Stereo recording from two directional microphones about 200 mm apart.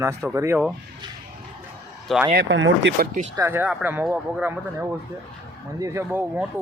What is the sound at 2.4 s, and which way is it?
Speech, 65° right (ahead or behind).